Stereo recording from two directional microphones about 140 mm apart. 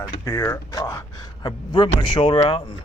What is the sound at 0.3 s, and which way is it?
A man's voice, 20° left (ahead or behind).